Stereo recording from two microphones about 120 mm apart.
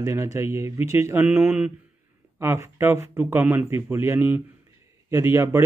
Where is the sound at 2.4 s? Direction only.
20° right (ahead or behind).